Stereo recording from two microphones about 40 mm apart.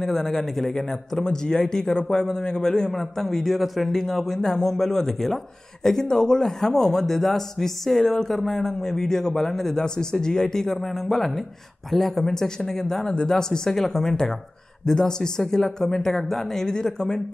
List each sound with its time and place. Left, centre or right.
0.0 s a man's voice: centre
13.1 s a man's voice: centre